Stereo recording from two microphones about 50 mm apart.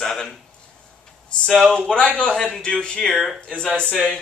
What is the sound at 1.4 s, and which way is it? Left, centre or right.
A man's voice, centre.